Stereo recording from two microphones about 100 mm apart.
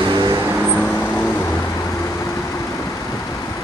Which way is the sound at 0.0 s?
45° right (ahead or behind).